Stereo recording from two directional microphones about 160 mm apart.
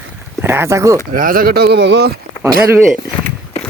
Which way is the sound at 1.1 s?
60° right (ahead or behind).